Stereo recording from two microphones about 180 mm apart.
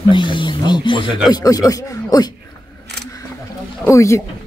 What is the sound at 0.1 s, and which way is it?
Speech, 25° left (ahead or behind).